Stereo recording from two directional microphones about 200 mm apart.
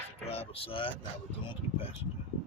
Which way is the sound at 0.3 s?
30° left (ahead or behind).